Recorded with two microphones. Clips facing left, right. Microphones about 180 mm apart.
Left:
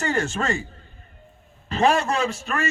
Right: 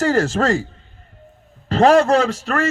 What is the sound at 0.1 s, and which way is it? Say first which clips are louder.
Speech: right 7 dB; 90° right.